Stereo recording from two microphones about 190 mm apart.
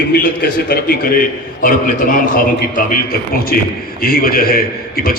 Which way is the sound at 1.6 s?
45° left (ahead or behind).